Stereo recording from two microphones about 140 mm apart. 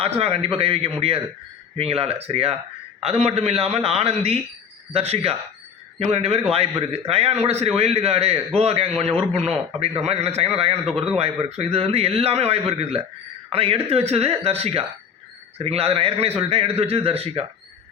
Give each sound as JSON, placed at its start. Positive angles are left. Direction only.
{"t": 0.0, "sound": "a man's voice", "side_deg": -45}